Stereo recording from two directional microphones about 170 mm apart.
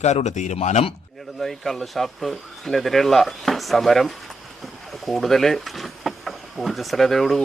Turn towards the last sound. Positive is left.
turn(degrees=0)  # may be behind; listen again after turning